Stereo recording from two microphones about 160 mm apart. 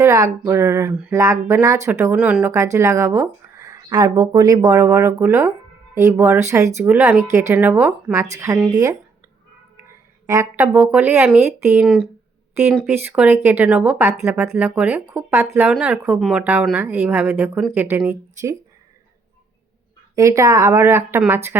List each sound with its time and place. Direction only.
0.0 s speech: 20° right (ahead or behind)
8.7 s speech: 25° right (ahead or behind)
10.2 s speech: 15° right (ahead or behind)
12.6 s speech: 5° right (ahead or behind)
20.1 s speech: 20° right (ahead or behind)